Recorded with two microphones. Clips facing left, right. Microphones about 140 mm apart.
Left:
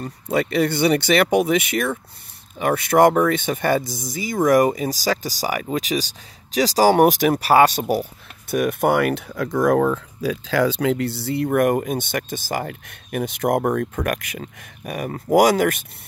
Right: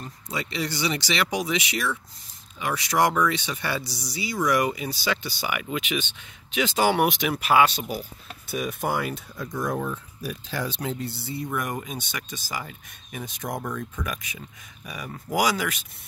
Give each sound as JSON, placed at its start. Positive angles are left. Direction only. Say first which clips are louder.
{"t": 0.0, "sound": "speech", "louder": "left 11 dB", "side_deg": 55}
{"t": 7.9, "sound": "speech", "louder": "left 10 dB", "side_deg": 60}